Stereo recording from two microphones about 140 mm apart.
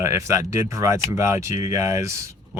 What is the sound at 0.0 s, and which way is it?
Speech, 20° right (ahead or behind).